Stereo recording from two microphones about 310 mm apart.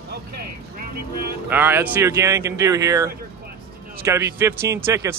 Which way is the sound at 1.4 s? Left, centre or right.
Centre.